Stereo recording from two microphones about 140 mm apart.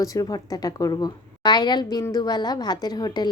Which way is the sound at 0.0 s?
25° left (ahead or behind).